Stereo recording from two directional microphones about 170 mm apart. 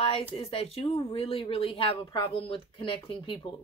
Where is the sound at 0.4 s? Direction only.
35° left (ahead or behind).